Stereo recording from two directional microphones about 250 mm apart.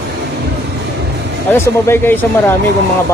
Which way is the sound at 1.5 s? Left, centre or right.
Centre.